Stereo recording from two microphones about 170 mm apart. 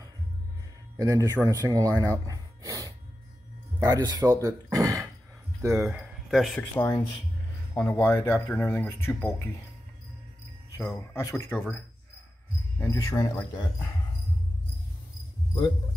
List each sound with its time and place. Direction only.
0.9 s speech: 20° right (ahead or behind)
5.8 s speech: 5° right (ahead or behind)
6.6 s speech: 15° left (ahead or behind)
10.8 s speech: 15° left (ahead or behind)
12.9 s speech: 20° left (ahead or behind)